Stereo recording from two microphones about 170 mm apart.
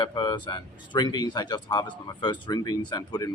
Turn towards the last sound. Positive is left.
turn(degrees=20)  # may be behind; listen again after turning